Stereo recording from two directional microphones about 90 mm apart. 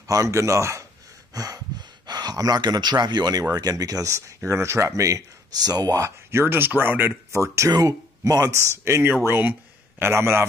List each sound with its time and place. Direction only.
0.0 s speech: 35° right (ahead or behind)
1.3 s speech: 45° right (ahead or behind); by 7.2 s 20° right (ahead or behind)
7.3 s speech: 35° right (ahead or behind)